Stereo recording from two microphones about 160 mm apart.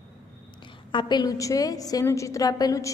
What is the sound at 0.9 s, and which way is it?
A woman's voice, 30° left (ahead or behind).